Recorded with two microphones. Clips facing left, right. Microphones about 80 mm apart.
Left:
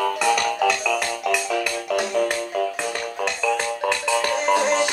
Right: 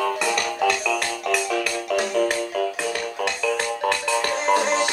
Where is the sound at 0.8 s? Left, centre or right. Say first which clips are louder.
Left 1 dB; centre.